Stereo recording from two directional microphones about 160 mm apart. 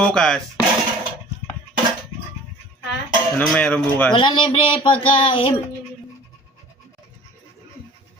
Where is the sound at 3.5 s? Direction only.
10° left (ahead or behind).